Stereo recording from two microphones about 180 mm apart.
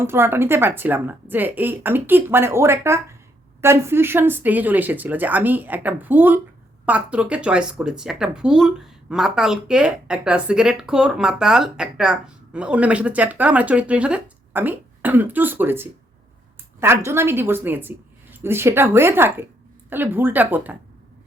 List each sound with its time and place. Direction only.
0.0 s a woman's voice: 15° right (ahead or behind)